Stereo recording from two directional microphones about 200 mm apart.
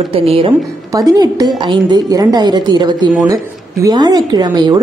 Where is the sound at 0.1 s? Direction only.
25° right (ahead or behind).